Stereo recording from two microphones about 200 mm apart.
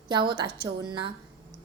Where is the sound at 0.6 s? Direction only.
25° right (ahead or behind).